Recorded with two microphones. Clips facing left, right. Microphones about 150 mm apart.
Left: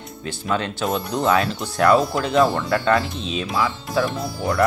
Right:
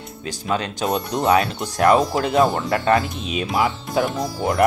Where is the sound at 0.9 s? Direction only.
20° right (ahead or behind).